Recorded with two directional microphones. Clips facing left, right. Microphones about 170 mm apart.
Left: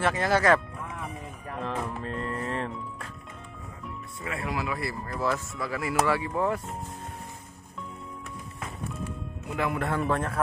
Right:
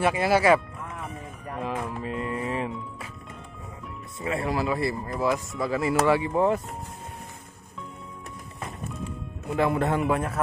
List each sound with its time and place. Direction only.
0.0 s speech: 10° right (ahead or behind)
1.6 s speech: 5° right (ahead or behind)
4.2 s speech: 30° right (ahead or behind)
5.1 s speech: 15° right (ahead or behind)
5.6 s speech: 25° right (ahead or behind)
9.6 s speech: 30° right (ahead or behind); by 10.3 s 10° right (ahead or behind)